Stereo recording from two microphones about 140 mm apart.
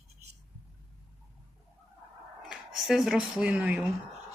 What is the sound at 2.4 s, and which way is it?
Speech, 5° right (ahead or behind).